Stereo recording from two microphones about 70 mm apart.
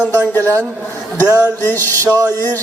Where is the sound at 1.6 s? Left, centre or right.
Left.